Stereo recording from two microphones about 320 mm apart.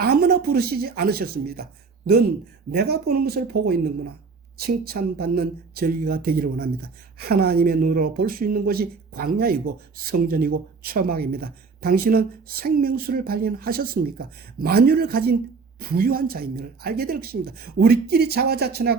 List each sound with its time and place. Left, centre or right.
0.0 s a woman's voice: right
2.9 s speech: right